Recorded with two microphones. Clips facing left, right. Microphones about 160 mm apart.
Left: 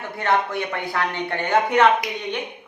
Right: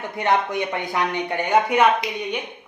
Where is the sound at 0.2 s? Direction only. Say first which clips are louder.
Right 1 dB; 15° right (ahead or behind).